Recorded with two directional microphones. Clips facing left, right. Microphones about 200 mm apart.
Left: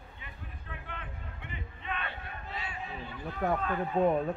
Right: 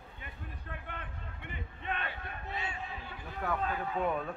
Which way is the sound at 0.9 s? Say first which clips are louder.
Left 1 dB; 50° right (ahead or behind).